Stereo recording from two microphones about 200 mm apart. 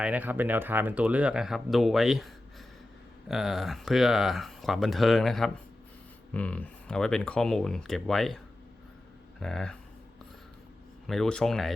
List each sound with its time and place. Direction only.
0.0 s speech: 10° right (ahead or behind)
9.4 s speech: 5° left (ahead or behind)
11.0 s speech: centre (ahead or behind)